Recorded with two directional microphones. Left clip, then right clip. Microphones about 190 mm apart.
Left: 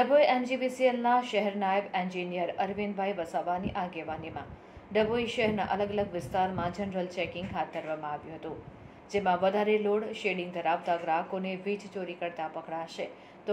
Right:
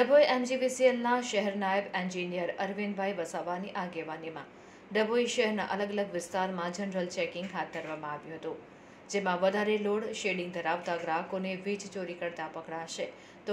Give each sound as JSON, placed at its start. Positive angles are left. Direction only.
{"t": 0.0, "sound": "a woman's voice", "side_deg": -30}
{"t": 9.1, "sound": "a woman's voice", "side_deg": -30}